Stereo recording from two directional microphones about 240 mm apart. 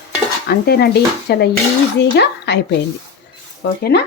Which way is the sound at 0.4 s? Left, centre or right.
Left.